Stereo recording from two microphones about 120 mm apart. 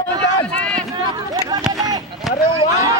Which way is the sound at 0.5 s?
10° left (ahead or behind).